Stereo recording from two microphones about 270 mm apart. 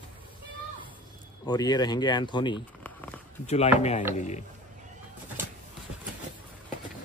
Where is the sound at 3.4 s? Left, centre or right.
Left.